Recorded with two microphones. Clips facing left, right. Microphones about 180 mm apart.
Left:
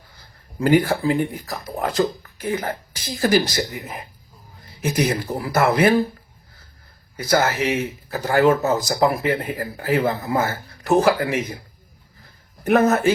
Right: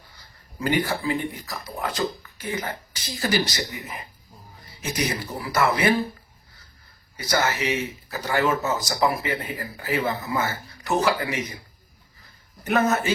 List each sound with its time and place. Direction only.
0.6 s speech: 55° left (ahead or behind)
7.3 s speech: 55° left (ahead or behind)
12.6 s speech: 55° left (ahead or behind)